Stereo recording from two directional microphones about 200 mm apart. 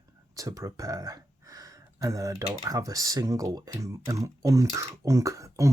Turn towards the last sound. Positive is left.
turn(degrees=-15)  # may be behind; listen again after turning